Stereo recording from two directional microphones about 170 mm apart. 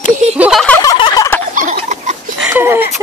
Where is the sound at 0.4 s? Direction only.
5° right (ahead or behind).